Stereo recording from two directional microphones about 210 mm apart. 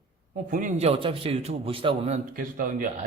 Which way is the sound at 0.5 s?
35° right (ahead or behind).